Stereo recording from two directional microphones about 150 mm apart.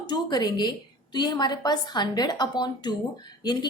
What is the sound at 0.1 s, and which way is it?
A woman's voice, 30° left (ahead or behind).